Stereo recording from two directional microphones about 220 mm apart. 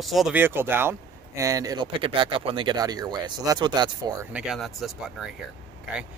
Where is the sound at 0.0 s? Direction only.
Centre (ahead or behind); by 4.3 s 20° right (ahead or behind).